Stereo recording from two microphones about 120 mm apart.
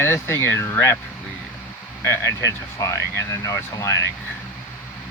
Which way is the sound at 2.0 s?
25° left (ahead or behind).